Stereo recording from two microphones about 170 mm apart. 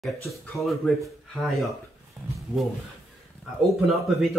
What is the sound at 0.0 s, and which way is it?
Speech, centre (ahead or behind).